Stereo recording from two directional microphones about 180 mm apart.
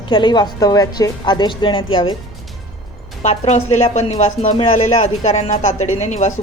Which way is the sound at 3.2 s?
40° left (ahead or behind).